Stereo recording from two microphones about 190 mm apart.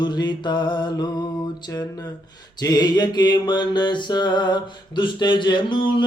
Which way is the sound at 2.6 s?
20° left (ahead or behind).